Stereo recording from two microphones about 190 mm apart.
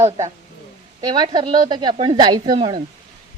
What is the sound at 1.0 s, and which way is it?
Speech, 25° right (ahead or behind).